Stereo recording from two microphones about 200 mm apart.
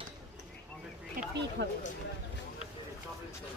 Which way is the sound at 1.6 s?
60° right (ahead or behind).